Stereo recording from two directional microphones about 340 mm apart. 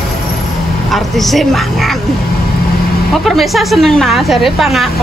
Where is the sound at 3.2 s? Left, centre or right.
Centre.